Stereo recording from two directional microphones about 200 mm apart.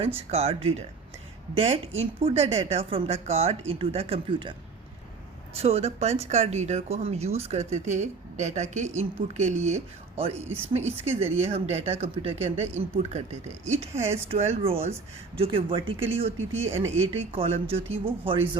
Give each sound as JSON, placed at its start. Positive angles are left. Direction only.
{"t": 0.3, "sound": "speech", "side_deg": -30}
{"t": 5.5, "sound": "speech", "side_deg": -30}
{"t": 16.4, "sound": "speech", "side_deg": -85}
{"t": 16.7, "sound": "speech", "side_deg": -30}